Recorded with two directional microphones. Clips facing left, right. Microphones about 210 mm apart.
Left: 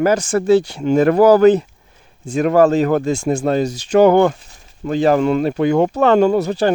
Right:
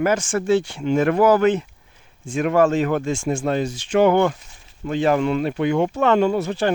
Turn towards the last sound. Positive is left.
turn(degrees=40)  # may be behind; listen again after turning